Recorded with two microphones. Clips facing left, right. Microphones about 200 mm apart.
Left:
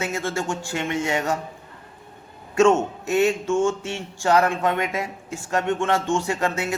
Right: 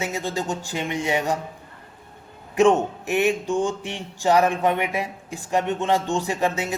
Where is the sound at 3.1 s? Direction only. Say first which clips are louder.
Left 2 dB; 15° right (ahead or behind).